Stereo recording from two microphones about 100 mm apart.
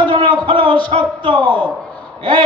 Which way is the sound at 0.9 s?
55° right (ahead or behind).